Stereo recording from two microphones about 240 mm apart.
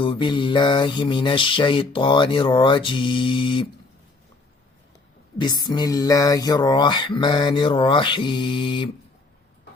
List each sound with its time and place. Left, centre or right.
0.0 s mantra: left
5.4 s mantra: centre